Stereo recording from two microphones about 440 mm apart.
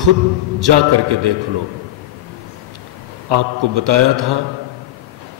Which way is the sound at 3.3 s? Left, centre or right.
Right.